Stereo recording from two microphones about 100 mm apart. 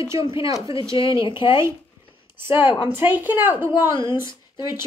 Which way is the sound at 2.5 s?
55° left (ahead or behind).